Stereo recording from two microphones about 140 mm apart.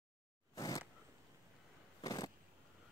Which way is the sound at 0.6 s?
25° left (ahead or behind).